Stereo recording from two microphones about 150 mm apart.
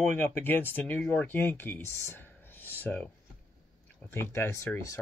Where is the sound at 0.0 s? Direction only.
10° left (ahead or behind).